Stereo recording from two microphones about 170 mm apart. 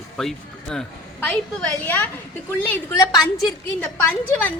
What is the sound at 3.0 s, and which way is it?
Speech, 20° left (ahead or behind).